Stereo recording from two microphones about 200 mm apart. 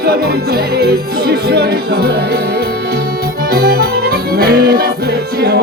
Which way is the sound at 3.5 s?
50° right (ahead or behind).